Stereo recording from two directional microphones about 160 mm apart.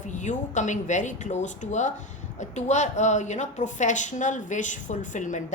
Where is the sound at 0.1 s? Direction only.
50° left (ahead or behind).